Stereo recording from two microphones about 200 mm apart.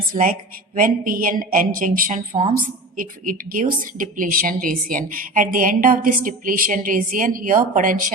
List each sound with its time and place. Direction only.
0.1 s a woman's voice: 45° right (ahead or behind)